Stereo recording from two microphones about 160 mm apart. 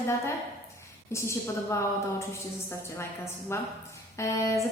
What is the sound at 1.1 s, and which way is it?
Speech, 15° left (ahead or behind).